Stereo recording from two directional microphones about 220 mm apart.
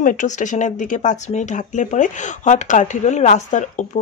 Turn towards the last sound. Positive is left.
turn(degrees=35)  # may be behind; listen again after turning